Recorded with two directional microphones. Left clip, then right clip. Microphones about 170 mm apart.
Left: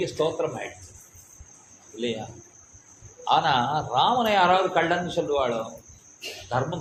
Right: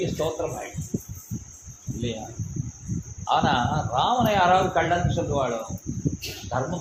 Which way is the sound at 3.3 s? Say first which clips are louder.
Left 1 dB; 50° left (ahead or behind).